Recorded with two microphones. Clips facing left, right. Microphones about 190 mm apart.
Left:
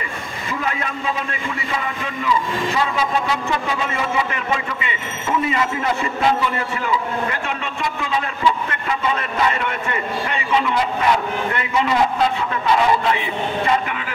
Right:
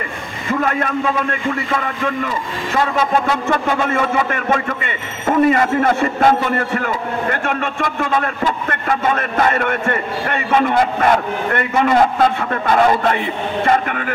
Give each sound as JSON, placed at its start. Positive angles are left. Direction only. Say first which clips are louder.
{"t": 0.5, "sound": "a man's voice", "louder": "right 7 dB", "side_deg": -50}